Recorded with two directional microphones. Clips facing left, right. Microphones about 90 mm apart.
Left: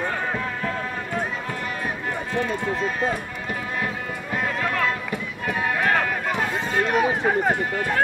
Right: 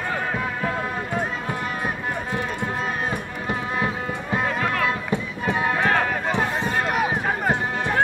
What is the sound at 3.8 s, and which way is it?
Music, 25° right (ahead or behind).